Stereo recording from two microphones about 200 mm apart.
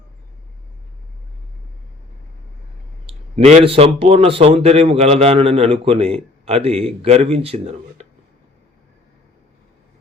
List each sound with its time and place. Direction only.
3.1 s speech: 30° right (ahead or behind)